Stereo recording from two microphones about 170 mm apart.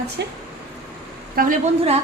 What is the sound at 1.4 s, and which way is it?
Speech, 60° right (ahead or behind).